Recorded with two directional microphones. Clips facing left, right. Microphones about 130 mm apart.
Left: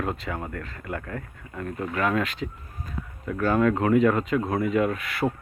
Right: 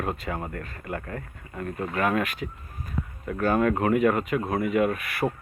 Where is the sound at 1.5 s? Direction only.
15° right (ahead or behind).